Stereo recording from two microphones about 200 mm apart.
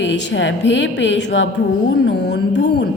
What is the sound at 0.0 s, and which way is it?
A woman's voice, 65° left (ahead or behind).